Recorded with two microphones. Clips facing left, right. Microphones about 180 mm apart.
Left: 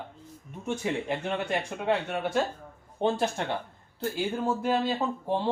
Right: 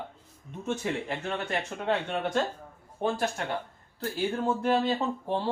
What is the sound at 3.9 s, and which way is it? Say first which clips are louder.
Speech: even; 10° left (ahead or behind).